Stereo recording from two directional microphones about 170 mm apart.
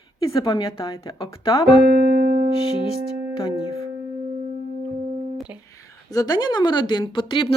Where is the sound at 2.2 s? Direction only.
60° right (ahead or behind).